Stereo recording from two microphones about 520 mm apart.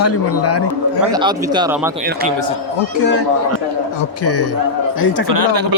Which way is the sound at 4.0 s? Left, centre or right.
Left.